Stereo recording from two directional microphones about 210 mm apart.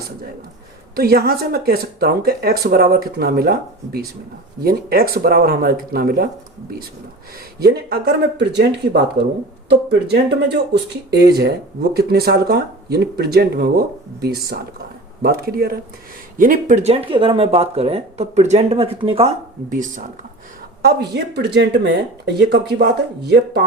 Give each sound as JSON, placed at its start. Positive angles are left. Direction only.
{"t": 0.9, "sound": "speech", "side_deg": -45}
{"t": 7.6, "sound": "speech", "side_deg": -50}
{"t": 19.7, "sound": "speech", "side_deg": -40}
{"t": 20.8, "sound": "speech", "side_deg": -50}